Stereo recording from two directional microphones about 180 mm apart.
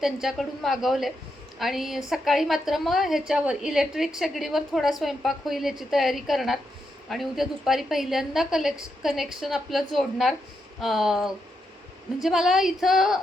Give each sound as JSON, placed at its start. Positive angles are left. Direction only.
{"t": 0.0, "sound": "a woman's voice", "side_deg": 0}